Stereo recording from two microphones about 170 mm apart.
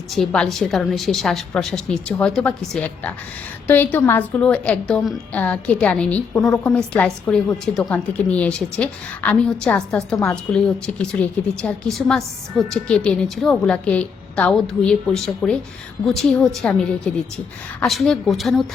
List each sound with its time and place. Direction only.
0.1 s a woman's voice: 5° left (ahead or behind)
6.4 s a woman's voice: 20° left (ahead or behind)
6.7 s a woman's voice: 5° left (ahead or behind)